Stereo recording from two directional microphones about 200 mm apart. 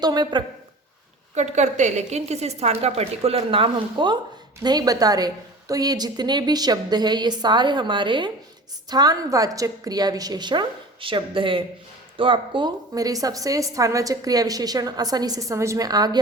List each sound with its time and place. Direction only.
0.0 s a woman's voice: 20° right (ahead or behind)
1.4 s a woman's voice: 35° right (ahead or behind); by 16.2 s 20° right (ahead or behind)